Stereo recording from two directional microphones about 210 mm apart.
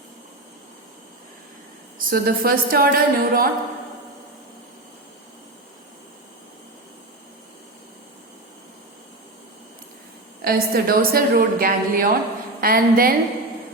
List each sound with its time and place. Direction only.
2.0 s a woman's voice: 45° right (ahead or behind)
10.4 s a woman's voice: 45° right (ahead or behind)